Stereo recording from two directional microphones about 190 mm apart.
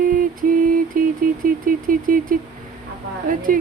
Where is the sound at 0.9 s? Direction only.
45° right (ahead or behind).